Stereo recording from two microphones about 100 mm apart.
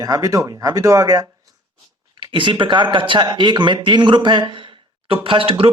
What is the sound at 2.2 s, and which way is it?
Speech, 55° right (ahead or behind).